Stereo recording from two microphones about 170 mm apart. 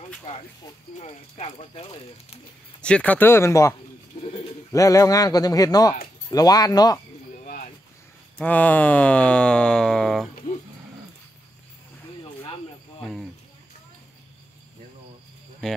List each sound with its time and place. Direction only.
0.9 s speech: 40° left (ahead or behind)
2.8 s speech: 5° left (ahead or behind)
4.7 s a man's voice: 20° left (ahead or behind)
7.3 s cricket: 50° left (ahead or behind)
8.4 s speech: 10° left (ahead or behind)
10.3 s a sound: 45° left (ahead or behind)
13.0 s cricket: centre (ahead or behind)
15.6 s speech: 5° left (ahead or behind)